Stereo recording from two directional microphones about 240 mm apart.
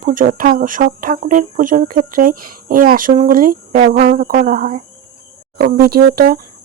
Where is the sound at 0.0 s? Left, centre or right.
Right.